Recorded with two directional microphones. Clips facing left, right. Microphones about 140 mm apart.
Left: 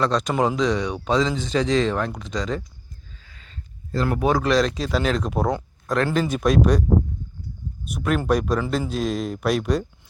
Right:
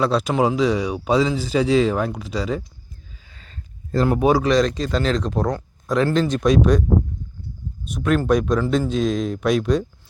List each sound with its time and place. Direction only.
0.0 s speech: 5° right (ahead or behind)
3.3 s a sound: 40° right (ahead or behind)
4.0 s speech: 25° right (ahead or behind)
4.3 s speech: 5° right (ahead or behind)
7.9 s speech: 5° left (ahead or behind)